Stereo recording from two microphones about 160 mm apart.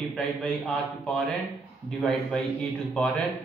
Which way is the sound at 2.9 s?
5° left (ahead or behind).